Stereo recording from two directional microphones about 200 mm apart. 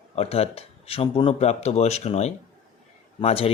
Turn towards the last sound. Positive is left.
turn(degrees=30)  # may be behind; listen again after turning